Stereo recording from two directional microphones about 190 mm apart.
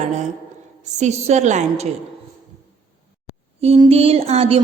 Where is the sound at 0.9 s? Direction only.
35° right (ahead or behind).